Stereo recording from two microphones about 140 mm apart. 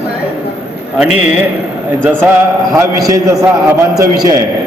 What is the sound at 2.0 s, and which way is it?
A man's voice, 15° right (ahead or behind).